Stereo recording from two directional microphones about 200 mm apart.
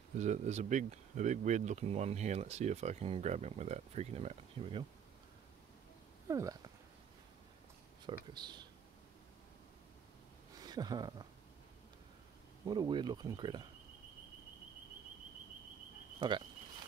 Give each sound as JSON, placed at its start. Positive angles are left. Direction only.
{"t": 0.2, "sound": "speech", "side_deg": -35}
{"t": 6.2, "sound": "speech", "side_deg": -15}
{"t": 8.1, "sound": "speech", "side_deg": -20}
{"t": 10.6, "sound": "speech", "side_deg": -20}
{"t": 12.6, "sound": "speech", "side_deg": -20}
{"t": 16.2, "sound": "speech", "side_deg": -20}